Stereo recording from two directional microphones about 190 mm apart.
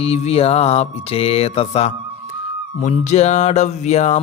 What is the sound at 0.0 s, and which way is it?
Music, 30° left (ahead or behind).